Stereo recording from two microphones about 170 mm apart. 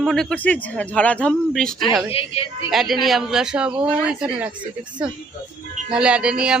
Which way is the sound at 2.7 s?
Centre (ahead or behind).